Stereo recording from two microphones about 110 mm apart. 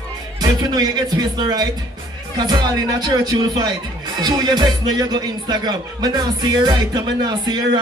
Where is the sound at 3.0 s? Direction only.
40° right (ahead or behind).